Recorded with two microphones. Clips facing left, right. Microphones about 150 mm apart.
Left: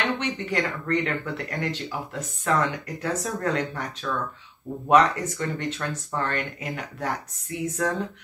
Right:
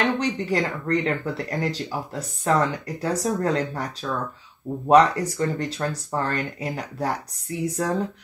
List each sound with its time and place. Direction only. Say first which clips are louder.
0.0 s speech: right 4 dB; 35° right (ahead or behind)